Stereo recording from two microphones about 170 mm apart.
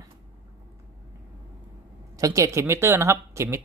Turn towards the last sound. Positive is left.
turn(degrees=-15)  # may be behind; listen again after turning